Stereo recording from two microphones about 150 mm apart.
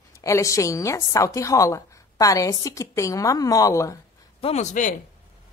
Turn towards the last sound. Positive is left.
turn(degrees=55)  # may be behind; listen again after turning